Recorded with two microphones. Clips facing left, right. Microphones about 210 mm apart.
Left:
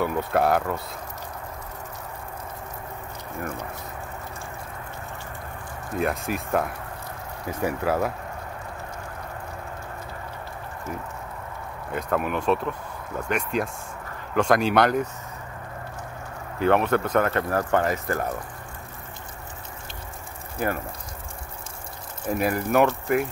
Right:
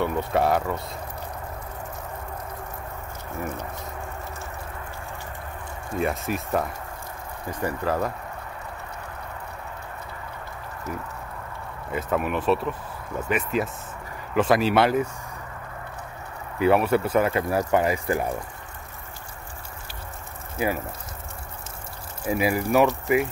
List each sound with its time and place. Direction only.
0.0 s speech: centre (ahead or behind)
5.9 s speech: centre (ahead or behind)
11.9 s speech: centre (ahead or behind)
16.5 s speech: 5° right (ahead or behind)
20.5 s speech: 5° right (ahead or behind)
22.2 s speech: 5° right (ahead or behind)